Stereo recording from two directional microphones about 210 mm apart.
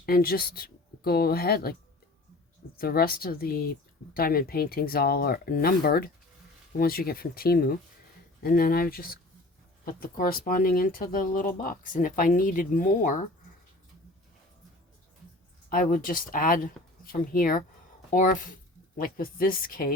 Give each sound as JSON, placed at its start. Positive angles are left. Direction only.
{"t": 0.0, "sound": "speech", "side_deg": 45}
{"t": 2.7, "sound": "speech", "side_deg": 45}
{"t": 15.7, "sound": "speech", "side_deg": 40}